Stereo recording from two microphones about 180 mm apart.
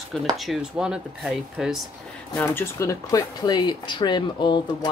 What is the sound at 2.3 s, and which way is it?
Speech, 10° left (ahead or behind).